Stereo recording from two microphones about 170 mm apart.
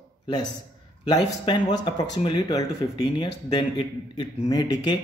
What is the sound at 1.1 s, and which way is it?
Speech, 30° left (ahead or behind).